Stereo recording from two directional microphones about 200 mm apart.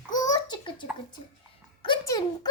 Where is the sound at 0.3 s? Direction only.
20° left (ahead or behind).